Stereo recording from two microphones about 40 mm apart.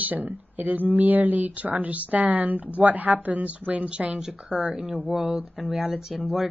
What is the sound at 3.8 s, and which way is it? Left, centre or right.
Speech, right.